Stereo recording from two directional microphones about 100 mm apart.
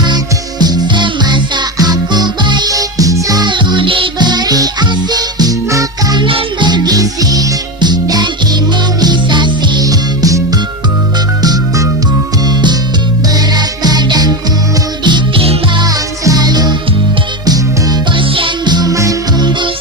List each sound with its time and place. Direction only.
0.6 s music: 45° right (ahead or behind)
6.1 s music: 55° right (ahead or behind); by 10.4 s 40° right (ahead or behind)
11.4 s music: 35° right (ahead or behind)
13.3 s music: 45° right (ahead or behind)
15.8 s music: 40° right (ahead or behind)
18.2 s music: 55° right (ahead or behind); by 19.5 s 35° right (ahead or behind)
19.5 s music: 50° right (ahead or behind)